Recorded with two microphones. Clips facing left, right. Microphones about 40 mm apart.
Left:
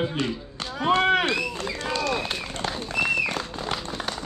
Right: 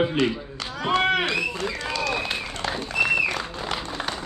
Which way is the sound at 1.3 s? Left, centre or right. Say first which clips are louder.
Right 1 dB; right.